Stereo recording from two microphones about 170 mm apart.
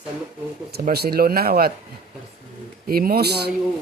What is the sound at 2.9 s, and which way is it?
Speech, 60° right (ahead or behind).